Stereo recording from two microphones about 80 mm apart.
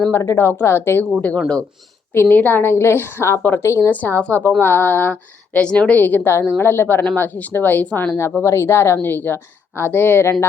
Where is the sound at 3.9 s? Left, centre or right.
Left.